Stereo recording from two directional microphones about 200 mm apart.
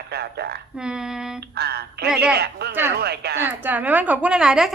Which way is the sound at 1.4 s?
55° right (ahead or behind).